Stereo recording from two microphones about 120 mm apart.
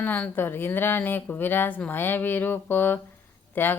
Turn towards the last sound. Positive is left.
turn(degrees=15)  # may be behind; listen again after turning